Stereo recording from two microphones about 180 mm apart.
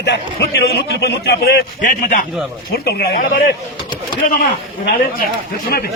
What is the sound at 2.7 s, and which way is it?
Speech, 65° left (ahead or behind).